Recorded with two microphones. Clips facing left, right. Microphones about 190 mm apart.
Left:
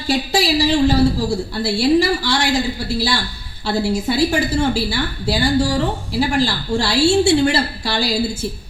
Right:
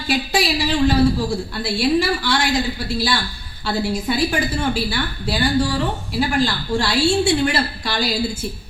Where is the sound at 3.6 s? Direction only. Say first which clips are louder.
Left 2 dB; 25° left (ahead or behind).